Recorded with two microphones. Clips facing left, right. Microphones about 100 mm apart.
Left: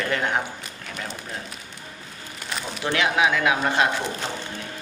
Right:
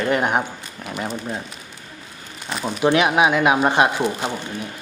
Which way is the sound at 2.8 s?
20° right (ahead or behind).